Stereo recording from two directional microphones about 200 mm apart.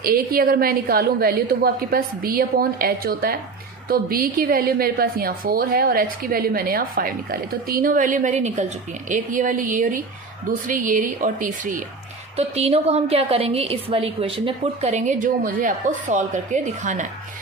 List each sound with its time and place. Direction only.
0.0 s a woman's voice: 45° right (ahead or behind)
12.4 s a woman's voice: 30° right (ahead or behind)